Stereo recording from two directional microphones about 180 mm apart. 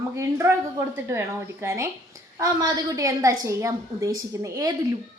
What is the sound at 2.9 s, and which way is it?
A woman's voice, 15° right (ahead or behind).